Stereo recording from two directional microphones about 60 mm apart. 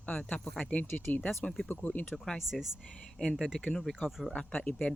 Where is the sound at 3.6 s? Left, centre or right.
Centre.